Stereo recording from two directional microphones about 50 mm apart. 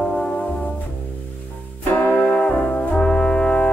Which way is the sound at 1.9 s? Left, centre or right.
Left.